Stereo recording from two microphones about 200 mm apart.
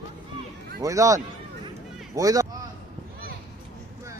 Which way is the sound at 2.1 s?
15° right (ahead or behind).